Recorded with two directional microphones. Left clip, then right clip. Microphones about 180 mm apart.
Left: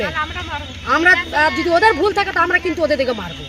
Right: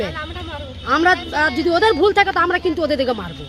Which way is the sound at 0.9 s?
35° right (ahead or behind).